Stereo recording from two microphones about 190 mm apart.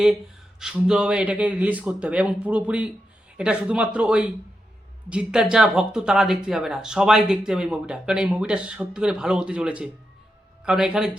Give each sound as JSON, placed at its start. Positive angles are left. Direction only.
{"t": 0.6, "sound": "speech", "side_deg": -5}